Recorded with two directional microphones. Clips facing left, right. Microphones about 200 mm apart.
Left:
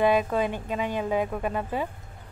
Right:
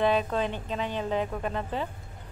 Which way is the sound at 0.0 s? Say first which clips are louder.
Left 3 dB; 10° left (ahead or behind).